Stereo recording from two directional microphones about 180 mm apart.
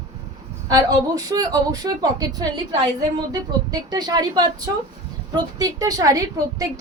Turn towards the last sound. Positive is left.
turn(degrees=-20)  # may be behind; listen again after turning